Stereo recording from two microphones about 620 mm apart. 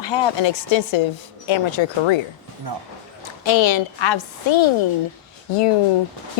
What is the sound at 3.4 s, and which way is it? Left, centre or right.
A woman's voice, left.